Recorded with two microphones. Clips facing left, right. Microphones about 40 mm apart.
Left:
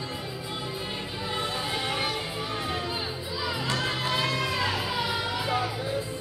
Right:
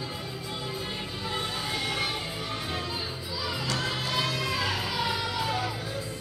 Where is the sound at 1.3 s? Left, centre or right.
Centre.